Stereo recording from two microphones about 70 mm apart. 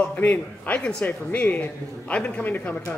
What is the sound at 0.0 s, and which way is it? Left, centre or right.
A man's voice, left.